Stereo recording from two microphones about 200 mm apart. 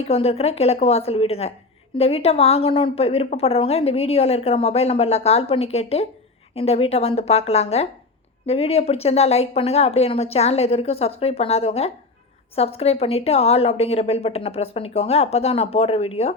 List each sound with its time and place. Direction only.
0.0 s a woman's voice: 30° left (ahead or behind)